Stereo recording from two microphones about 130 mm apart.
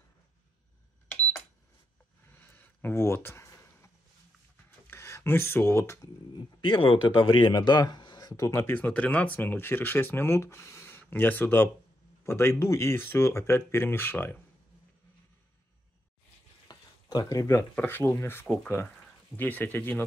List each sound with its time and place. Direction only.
2.2 s a sound: 15° left (ahead or behind)
6.3 s speech: 40° left (ahead or behind); by 14.3 s 15° left (ahead or behind)
16.6 s speech: 30° left (ahead or behind)